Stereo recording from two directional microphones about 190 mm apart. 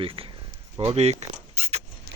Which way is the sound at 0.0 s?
30° right (ahead or behind).